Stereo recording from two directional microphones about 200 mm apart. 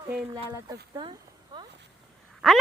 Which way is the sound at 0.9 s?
25° right (ahead or behind).